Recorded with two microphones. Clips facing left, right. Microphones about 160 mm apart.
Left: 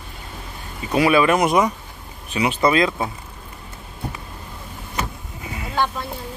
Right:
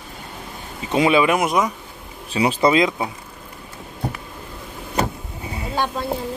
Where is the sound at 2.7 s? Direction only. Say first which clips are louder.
Right 1 dB; 20° right (ahead or behind).